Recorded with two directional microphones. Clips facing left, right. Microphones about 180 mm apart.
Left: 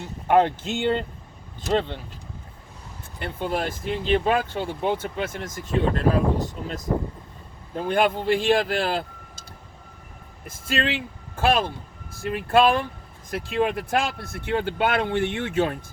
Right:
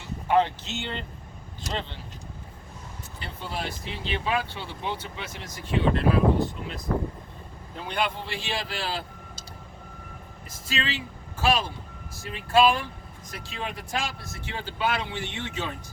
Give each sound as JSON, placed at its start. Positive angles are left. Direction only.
{"t": 0.0, "sound": "speech", "side_deg": 50}
{"t": 3.2, "sound": "speech", "side_deg": 55}
{"t": 7.8, "sound": "speech", "side_deg": 50}
{"t": 10.4, "sound": "speech", "side_deg": 55}